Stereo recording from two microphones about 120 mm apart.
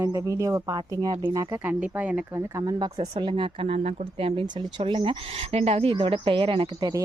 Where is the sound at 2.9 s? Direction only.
60° right (ahead or behind).